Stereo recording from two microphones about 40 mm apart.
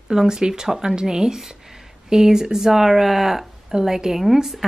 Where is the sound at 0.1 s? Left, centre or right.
Centre.